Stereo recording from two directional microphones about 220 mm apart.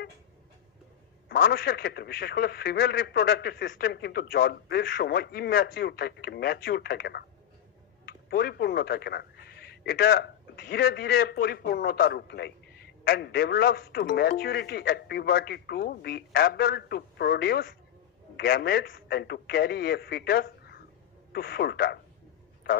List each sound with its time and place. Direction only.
1.3 s speech: 45° left (ahead or behind)